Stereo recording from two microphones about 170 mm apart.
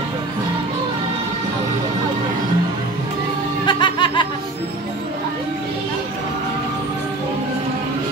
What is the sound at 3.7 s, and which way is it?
Snicker, 25° left (ahead or behind).